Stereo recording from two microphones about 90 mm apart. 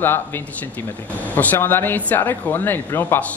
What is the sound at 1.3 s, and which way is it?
Speech, 20° left (ahead or behind).